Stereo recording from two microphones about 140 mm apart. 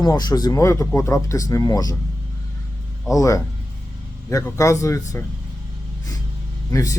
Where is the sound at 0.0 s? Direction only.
30° left (ahead or behind).